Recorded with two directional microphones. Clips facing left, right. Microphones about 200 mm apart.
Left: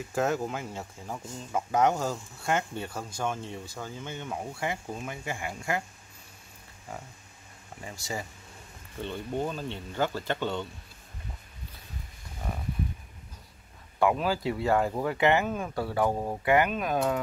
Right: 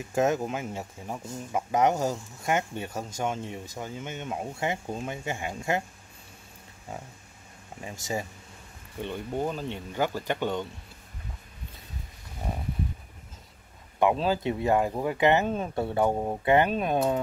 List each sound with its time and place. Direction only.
0.1 s speech: 20° right (ahead or behind)
6.9 s speech: 20° right (ahead or behind)
9.0 s speech: 15° right (ahead or behind)
13.9 s speech: 20° right (ahead or behind)